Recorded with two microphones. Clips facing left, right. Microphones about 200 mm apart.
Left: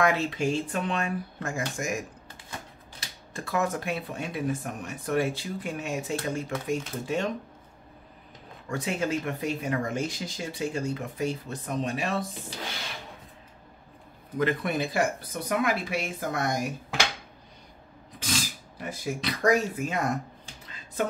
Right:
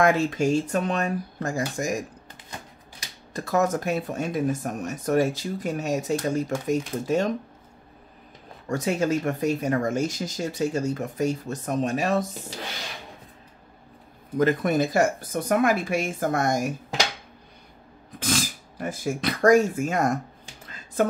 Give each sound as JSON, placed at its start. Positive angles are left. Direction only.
{"t": 0.0, "sound": "speech", "side_deg": -45}
{"t": 3.3, "sound": "speech", "side_deg": -40}
{"t": 8.6, "sound": "speech", "side_deg": -40}
{"t": 14.3, "sound": "speech", "side_deg": -45}
{"t": 18.2, "sound": "speech", "side_deg": -50}